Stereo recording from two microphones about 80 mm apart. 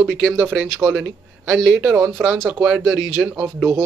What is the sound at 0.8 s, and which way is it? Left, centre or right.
Speech, right.